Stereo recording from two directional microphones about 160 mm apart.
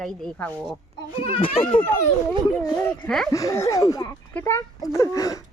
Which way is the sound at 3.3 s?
20° left (ahead or behind).